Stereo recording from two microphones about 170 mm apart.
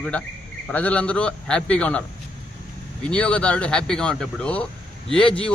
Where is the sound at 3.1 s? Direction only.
5° left (ahead or behind).